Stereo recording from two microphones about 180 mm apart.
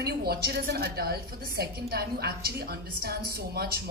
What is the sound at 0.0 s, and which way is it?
A woman's voice, 60° right (ahead or behind).